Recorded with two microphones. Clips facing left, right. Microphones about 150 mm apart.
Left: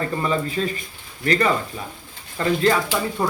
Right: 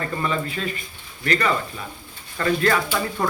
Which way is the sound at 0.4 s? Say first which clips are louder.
Left 4 dB; 35° left (ahead or behind).